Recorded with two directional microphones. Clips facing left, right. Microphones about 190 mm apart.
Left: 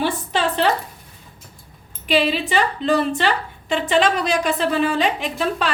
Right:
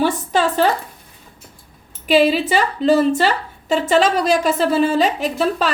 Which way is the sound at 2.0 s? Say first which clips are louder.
Right 5 dB; 40° right (ahead or behind).